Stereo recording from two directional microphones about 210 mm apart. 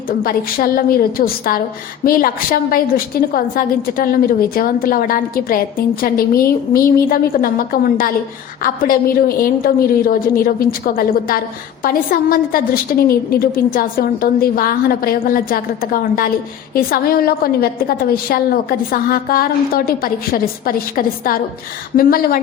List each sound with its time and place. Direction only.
0.2 s a woman's voice: 45° left (ahead or behind)